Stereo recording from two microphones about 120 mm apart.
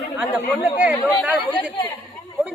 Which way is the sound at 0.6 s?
15° right (ahead or behind).